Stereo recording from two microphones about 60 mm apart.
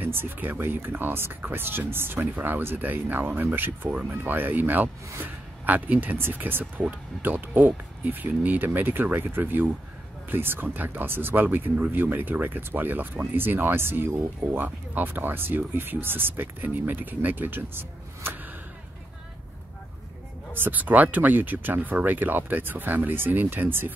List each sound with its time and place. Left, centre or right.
0.0 s speech: right
20.5 s speech: right